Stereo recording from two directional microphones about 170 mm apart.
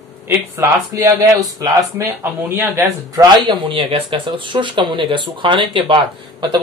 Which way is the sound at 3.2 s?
30° right (ahead or behind).